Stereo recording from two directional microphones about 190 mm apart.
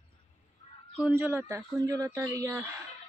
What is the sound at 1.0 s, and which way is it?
Speech, 10° right (ahead or behind).